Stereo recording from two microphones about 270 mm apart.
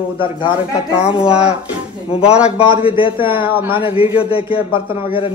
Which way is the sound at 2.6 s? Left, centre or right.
Centre.